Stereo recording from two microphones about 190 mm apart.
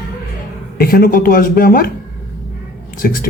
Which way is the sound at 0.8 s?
50° left (ahead or behind).